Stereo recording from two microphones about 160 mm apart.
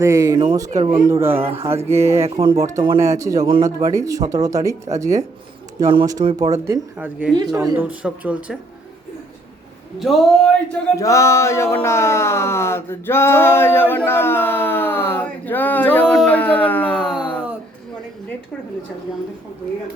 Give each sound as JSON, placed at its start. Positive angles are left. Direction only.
{"t": 0.0, "sound": "speech", "side_deg": -20}
{"t": 0.7, "sound": "speech", "side_deg": -45}
{"t": 1.1, "sound": "speech", "side_deg": -15}
{"t": 1.5, "sound": "a sound", "side_deg": -35}
{"t": 1.7, "sound": "speech", "side_deg": -15}
{"t": 6.9, "sound": "speech", "side_deg": -10}
{"t": 7.3, "sound": "speech", "side_deg": -20}
{"t": 10.0, "sound": "speech", "side_deg": 0}
{"t": 10.9, "sound": "speech", "side_deg": 20}
{"t": 17.1, "sound": "a sound", "side_deg": -5}